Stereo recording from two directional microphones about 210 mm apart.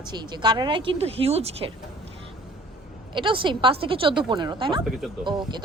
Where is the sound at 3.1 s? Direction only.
25° right (ahead or behind).